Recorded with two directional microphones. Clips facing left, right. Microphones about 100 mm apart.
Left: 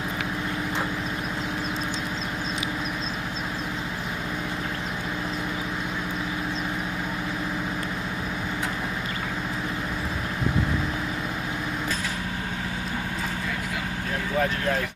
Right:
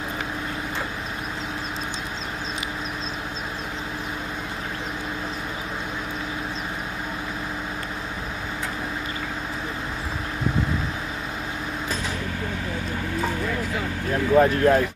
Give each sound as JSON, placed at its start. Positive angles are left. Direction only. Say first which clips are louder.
{"t": 14.3, "sound": "speech", "louder": "right 9 dB", "side_deg": -45}